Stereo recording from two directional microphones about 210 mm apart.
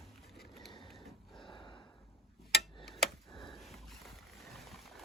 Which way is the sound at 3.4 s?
Centre (ahead or behind).